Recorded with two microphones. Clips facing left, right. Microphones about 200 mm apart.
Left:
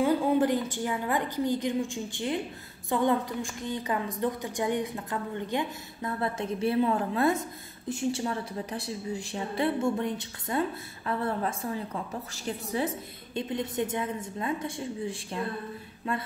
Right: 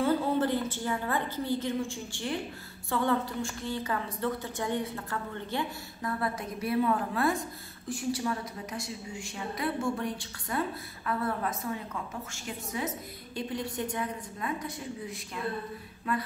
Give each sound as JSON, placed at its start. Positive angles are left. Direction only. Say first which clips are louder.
{"t": 0.0, "sound": "a woman's voice", "louder": "left 3 dB", "side_deg": 15}
{"t": 9.8, "sound": "a woman's voice", "louder": "left 3 dB", "side_deg": 20}